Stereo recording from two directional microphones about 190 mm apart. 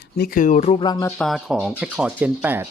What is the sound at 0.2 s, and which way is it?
Speech, 45° left (ahead or behind).